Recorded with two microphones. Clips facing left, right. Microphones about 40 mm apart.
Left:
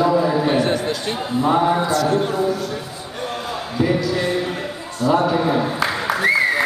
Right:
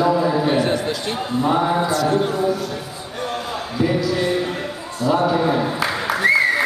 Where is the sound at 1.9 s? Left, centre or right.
Right.